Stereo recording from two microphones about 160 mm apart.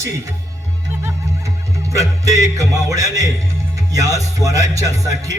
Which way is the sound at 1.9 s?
20° right (ahead or behind).